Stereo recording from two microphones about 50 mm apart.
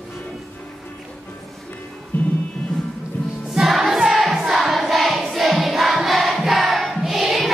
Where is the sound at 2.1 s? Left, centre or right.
Left.